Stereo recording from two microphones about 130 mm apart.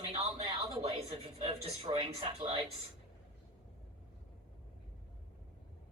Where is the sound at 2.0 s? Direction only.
40° right (ahead or behind).